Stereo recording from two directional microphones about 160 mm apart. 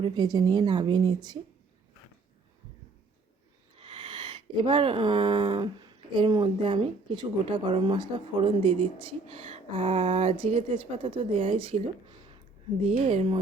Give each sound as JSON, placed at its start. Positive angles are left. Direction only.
{"t": 0.0, "sound": "a woman's voice", "side_deg": -25}
{"t": 3.8, "sound": "speech", "side_deg": -35}
{"t": 13.1, "sound": "speech", "side_deg": -35}